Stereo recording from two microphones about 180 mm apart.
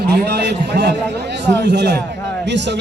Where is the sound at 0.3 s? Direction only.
70° right (ahead or behind).